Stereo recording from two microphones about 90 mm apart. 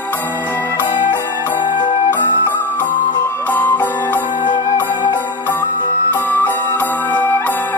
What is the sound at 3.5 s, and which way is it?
Music, 20° left (ahead or behind).